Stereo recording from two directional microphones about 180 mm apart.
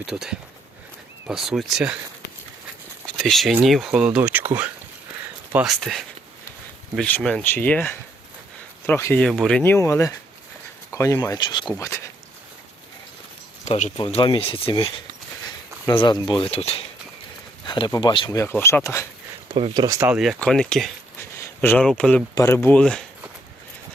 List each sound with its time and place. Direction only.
0.0 s speech: 5° right (ahead or behind)
3.1 s speech: centre (ahead or behind)
13.7 s speech: 40° left (ahead or behind)
14.0 s speech: 30° left (ahead or behind)
18.3 s speech: 15° left (ahead or behind)
19.5 s speech: 25° right (ahead or behind); by 22.2 s 5° left (ahead or behind)
22.4 s speech: 15° left (ahead or behind)